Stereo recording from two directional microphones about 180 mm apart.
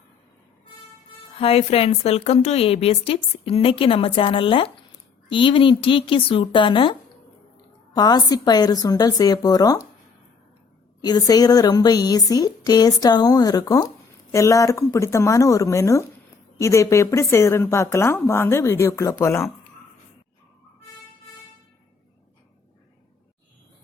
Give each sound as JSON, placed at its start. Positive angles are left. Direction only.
{"t": 1.4, "sound": "a woman's voice", "side_deg": 35}
{"t": 7.9, "sound": "a woman's voice", "side_deg": 20}
{"t": 11.0, "sound": "a woman's voice", "side_deg": 20}